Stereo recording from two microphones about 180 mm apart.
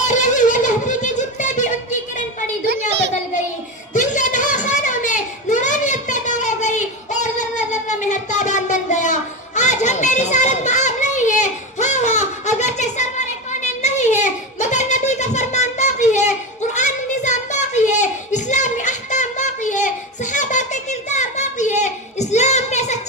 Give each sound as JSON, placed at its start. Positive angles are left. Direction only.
{"t": 0.0, "sound": "music", "side_deg": 45}
{"t": 3.9, "sound": "a sound", "side_deg": 45}
{"t": 9.6, "sound": "children playing", "side_deg": 40}